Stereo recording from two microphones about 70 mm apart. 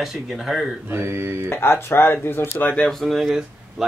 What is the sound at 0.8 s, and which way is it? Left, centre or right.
Mantra, right.